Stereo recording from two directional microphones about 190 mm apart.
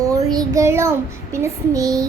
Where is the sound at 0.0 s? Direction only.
15° right (ahead or behind).